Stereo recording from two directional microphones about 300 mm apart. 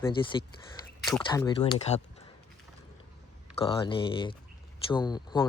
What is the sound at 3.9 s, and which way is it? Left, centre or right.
Speech, centre.